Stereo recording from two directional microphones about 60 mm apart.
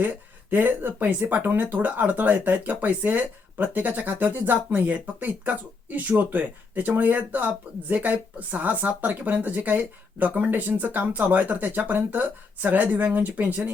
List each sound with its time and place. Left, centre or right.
0.0 s speech: right